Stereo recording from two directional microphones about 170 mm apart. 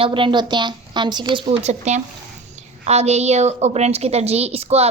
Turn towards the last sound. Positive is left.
turn(degrees=-35)  # may be behind; listen again after turning